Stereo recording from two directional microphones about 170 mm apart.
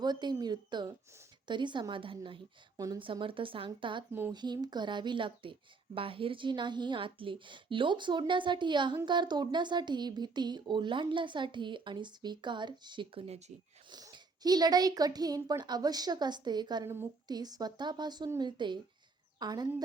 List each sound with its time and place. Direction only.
0.0 s speech: 25° right (ahead or behind)
2.7 s speech: 20° right (ahead or behind)
3.0 s speech: 30° right (ahead or behind)
13.9 s speech: 25° right (ahead or behind)